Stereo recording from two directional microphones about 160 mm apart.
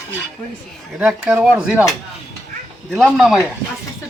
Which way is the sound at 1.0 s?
10° right (ahead or behind).